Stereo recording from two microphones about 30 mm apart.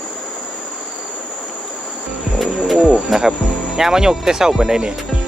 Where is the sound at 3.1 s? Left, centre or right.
Centre.